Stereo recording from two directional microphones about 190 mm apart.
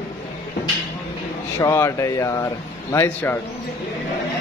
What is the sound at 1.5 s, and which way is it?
Speech, 15° left (ahead or behind).